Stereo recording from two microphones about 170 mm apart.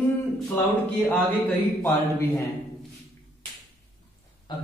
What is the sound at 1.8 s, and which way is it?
Speech, 15° left (ahead or behind).